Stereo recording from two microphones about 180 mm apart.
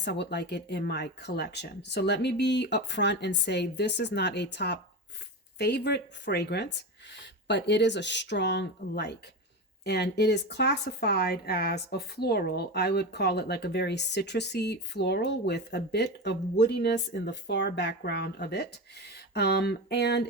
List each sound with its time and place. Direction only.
0.0 s speech: 70° left (ahead or behind)